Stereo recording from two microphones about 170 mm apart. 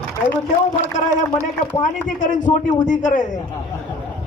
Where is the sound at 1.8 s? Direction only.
45° left (ahead or behind).